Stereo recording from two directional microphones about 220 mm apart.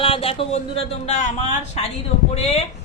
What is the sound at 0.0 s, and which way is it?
Speech, 25° left (ahead or behind).